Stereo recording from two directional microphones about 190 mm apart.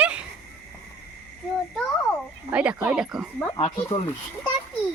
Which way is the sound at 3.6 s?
30° left (ahead or behind).